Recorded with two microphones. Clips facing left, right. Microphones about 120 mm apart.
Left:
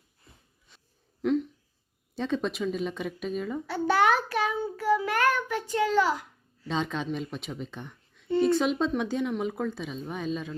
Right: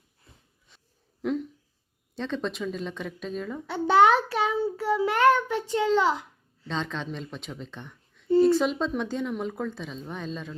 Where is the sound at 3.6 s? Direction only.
25° right (ahead or behind).